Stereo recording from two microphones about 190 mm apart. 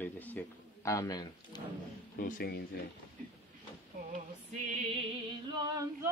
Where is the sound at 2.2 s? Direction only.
50° left (ahead or behind).